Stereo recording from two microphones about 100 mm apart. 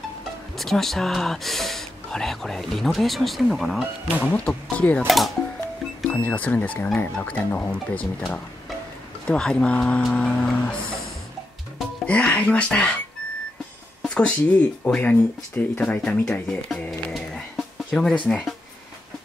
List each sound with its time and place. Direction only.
0.6 s speech: centre (ahead or behind)
4.3 s speech: 15° left (ahead or behind)
5.0 s speech: centre (ahead or behind)
6.0 s speech: 15° left (ahead or behind)
9.3 s speech: 10° left (ahead or behind)
12.1 s speech: 15° left (ahead or behind)
14.0 s speech: 10° left (ahead or behind)
17.1 s music: centre (ahead or behind)
17.9 s speech: 10° left (ahead or behind)